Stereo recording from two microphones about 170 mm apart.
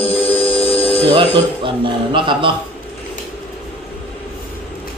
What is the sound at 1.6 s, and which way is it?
Speech, 30° right (ahead or behind).